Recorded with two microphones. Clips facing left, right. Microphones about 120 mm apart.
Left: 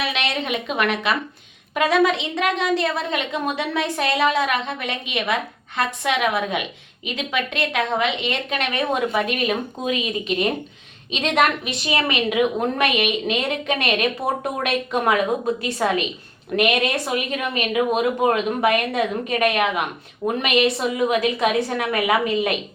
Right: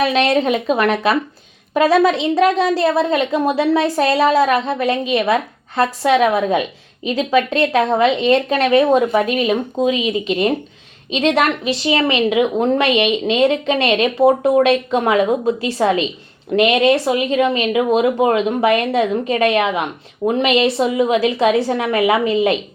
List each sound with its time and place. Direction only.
0.0 s a woman's voice: 40° right (ahead or behind)